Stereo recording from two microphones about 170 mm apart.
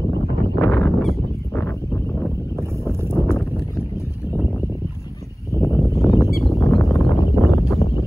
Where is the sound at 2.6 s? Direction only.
15° right (ahead or behind).